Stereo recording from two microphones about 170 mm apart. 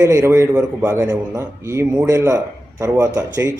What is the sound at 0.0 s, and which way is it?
A man's voice, 15° right (ahead or behind).